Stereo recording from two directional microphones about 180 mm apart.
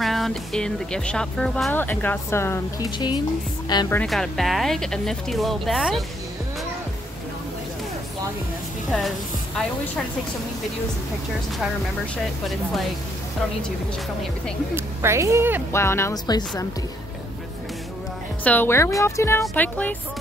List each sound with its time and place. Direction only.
0.0 s speech: centre (ahead or behind); by 3.8 s 25° left (ahead or behind)
3.9 s speech: 5° left (ahead or behind)
15.0 s speech: 15° right (ahead or behind)
15.7 s speech: 15° left (ahead or behind)
18.4 s speech: 10° left (ahead or behind)